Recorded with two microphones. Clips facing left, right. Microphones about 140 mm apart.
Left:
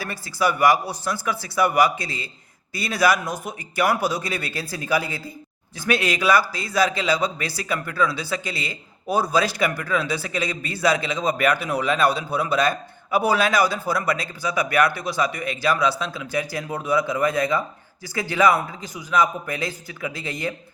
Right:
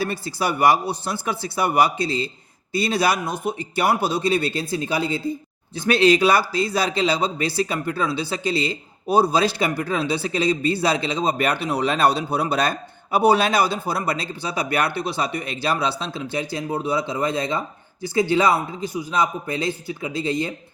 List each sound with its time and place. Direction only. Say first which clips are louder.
0.0 s a man's voice: even; 25° right (ahead or behind)